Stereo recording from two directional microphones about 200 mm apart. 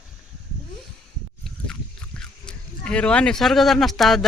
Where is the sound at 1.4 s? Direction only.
5° left (ahead or behind).